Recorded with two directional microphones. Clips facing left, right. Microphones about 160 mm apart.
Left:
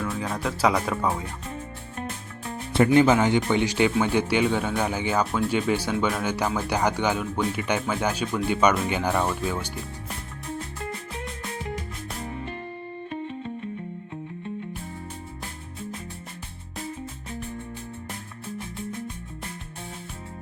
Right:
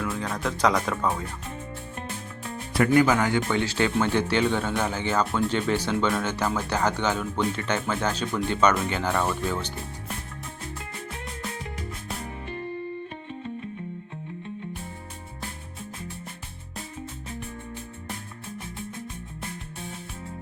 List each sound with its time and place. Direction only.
0.0 s speech: 5° left (ahead or behind)
2.7 s speech: 25° left (ahead or behind)
5.2 s speech: centre (ahead or behind)